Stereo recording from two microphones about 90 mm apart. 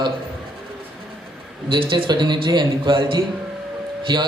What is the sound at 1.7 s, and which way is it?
A man's voice, 60° right (ahead or behind).